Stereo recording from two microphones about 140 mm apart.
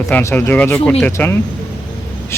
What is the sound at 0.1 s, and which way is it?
Speech, 15° left (ahead or behind).